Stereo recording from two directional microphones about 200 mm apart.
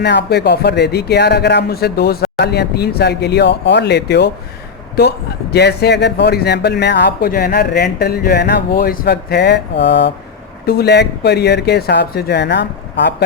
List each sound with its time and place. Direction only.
0.0 s speech: 60° left (ahead or behind)